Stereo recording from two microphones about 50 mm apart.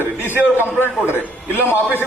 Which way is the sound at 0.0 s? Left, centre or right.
Left.